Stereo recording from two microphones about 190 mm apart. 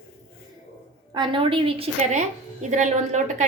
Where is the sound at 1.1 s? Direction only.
25° right (ahead or behind).